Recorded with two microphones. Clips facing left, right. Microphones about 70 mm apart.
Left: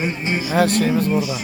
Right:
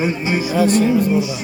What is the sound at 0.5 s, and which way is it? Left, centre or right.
Speech, left.